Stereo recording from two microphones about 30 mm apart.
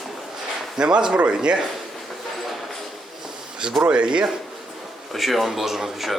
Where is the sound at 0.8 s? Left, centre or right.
Right.